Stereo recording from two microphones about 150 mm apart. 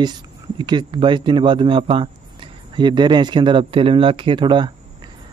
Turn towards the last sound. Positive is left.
turn(degrees=-30)  # may be behind; listen again after turning